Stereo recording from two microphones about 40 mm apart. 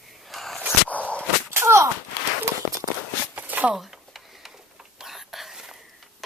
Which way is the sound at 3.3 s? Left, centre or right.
Right.